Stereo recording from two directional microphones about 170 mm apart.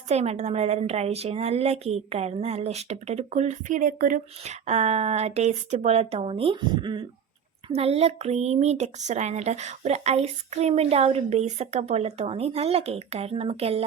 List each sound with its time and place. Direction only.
0.1 s speech: 40° right (ahead or behind)
4.6 s speech: 40° right (ahead or behind)